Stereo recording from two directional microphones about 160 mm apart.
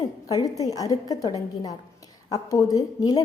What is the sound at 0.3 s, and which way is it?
A woman's voice, 20° left (ahead or behind).